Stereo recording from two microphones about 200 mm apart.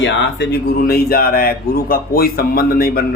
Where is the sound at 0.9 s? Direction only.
50° left (ahead or behind).